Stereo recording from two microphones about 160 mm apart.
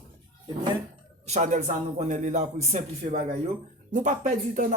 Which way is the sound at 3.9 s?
55° right (ahead or behind).